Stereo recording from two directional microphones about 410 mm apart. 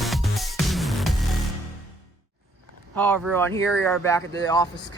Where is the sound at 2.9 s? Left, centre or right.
Centre.